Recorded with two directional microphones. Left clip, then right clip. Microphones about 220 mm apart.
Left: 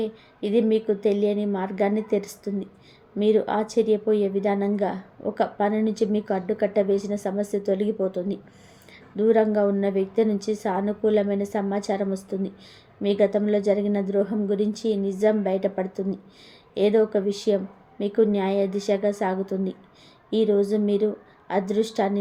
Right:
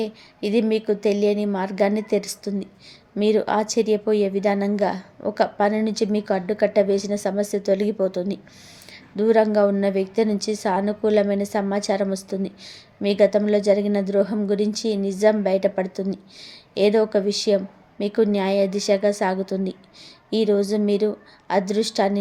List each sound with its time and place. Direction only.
0.0 s a woman's voice: 15° right (ahead or behind)